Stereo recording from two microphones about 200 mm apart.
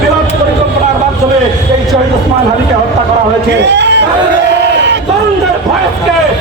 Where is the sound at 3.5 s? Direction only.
60° right (ahead or behind).